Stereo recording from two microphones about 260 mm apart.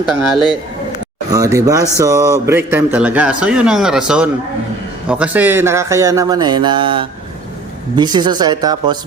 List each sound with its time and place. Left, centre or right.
0.0 s speech: centre
1.3 s speech: centre